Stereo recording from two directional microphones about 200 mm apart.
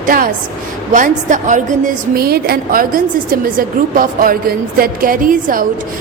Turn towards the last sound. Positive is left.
turn(degrees=-45)  # may be behind; listen again after turning